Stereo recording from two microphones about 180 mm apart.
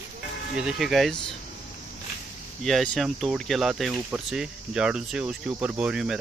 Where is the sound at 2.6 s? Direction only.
Centre (ahead or behind).